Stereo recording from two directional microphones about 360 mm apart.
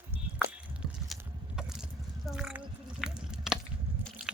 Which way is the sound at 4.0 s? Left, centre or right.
Centre.